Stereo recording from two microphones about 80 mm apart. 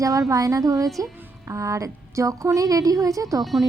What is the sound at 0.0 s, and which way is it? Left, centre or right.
A woman's voice, right.